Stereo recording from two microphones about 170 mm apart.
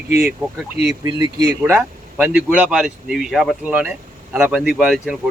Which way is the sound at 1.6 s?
10° right (ahead or behind).